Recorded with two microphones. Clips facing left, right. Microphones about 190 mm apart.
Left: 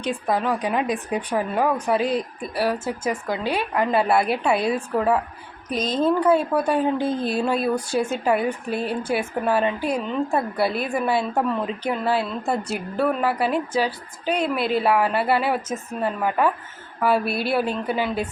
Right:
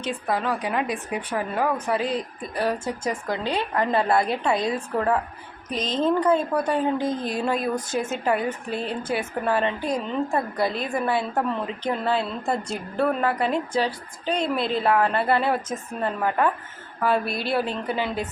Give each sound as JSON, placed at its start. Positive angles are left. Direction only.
{"t": 0.0, "sound": "a woman's voice", "side_deg": 15}
{"t": 8.1, "sound": "a woman's voice", "side_deg": 10}